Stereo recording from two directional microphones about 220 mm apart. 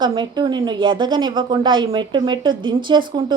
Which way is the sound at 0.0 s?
20° right (ahead or behind).